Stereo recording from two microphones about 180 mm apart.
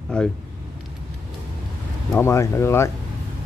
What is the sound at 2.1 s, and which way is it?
Speech, 15° left (ahead or behind).